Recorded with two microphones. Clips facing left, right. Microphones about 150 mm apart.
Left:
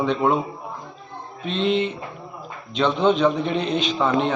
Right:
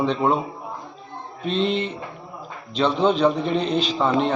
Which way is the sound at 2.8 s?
35° right (ahead or behind).